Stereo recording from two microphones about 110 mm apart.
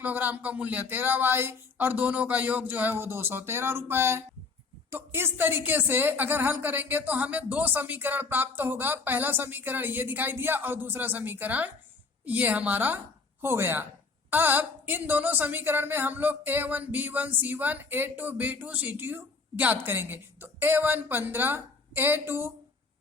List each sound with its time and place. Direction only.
0.0 s a woman's voice: 15° right (ahead or behind)